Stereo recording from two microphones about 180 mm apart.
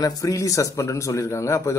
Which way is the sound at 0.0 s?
20° left (ahead or behind).